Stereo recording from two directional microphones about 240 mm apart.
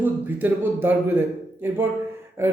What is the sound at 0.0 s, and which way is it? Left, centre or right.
A man's voice, centre.